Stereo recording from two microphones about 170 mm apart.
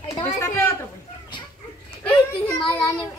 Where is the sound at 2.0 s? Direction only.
10° left (ahead or behind).